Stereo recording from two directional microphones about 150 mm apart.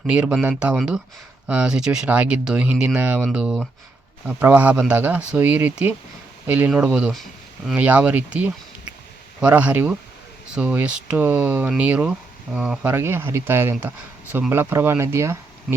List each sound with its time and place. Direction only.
0.1 s speech: 5° right (ahead or behind)
12.9 s speech: 15° right (ahead or behind)